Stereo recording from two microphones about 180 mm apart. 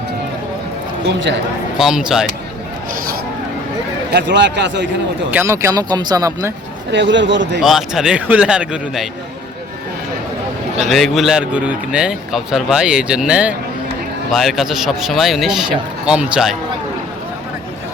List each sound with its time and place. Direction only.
1.8 s speech: 5° right (ahead or behind)
4.1 s speech: 75° right (ahead or behind)
5.3 s speech: 15° right (ahead or behind)
6.9 s a man's voice: 85° right
7.6 s speech: centre (ahead or behind)
10.8 s speech: centre (ahead or behind)